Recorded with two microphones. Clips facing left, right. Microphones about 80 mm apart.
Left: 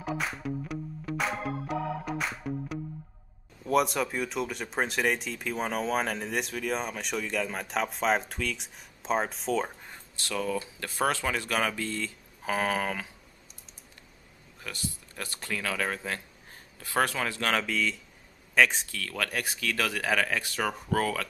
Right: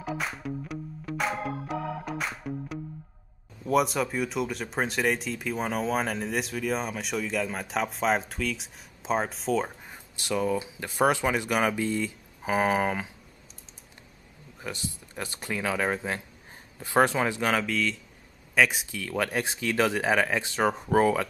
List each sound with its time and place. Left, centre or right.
0.0 s music: centre
3.6 s speech: centre
14.6 s speech: right
17.5 s speech: centre; by 21.3 s right